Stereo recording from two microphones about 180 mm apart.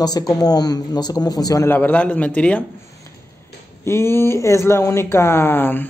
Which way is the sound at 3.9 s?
15° left (ahead or behind).